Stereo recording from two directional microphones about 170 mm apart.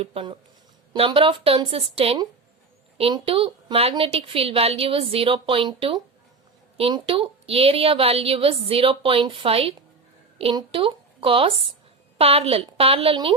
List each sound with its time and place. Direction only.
0.0 s a woman's voice: 30° right (ahead or behind)